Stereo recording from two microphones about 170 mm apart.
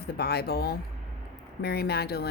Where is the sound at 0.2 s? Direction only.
65° left (ahead or behind).